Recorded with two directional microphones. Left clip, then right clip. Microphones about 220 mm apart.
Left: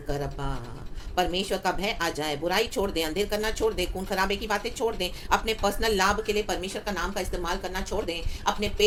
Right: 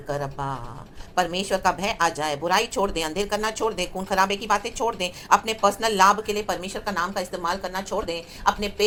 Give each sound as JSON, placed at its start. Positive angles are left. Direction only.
{"t": 0.1, "sound": "speech", "side_deg": -5}